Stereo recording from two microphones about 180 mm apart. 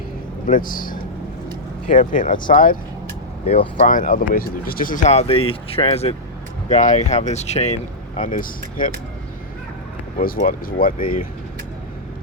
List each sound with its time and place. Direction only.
0.4 s speech: 50° left (ahead or behind)
3.4 s speech: 35° left (ahead or behind)
3.8 s speech: 50° left (ahead or behind)
10.2 s speech: 50° left (ahead or behind)